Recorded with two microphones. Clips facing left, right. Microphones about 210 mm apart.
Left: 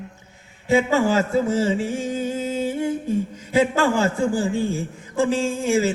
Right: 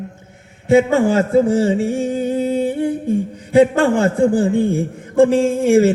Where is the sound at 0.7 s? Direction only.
55° right (ahead or behind).